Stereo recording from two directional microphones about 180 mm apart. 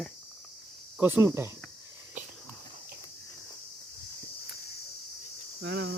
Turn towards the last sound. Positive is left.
turn(degrees=-70)  # may be behind; listen again after turning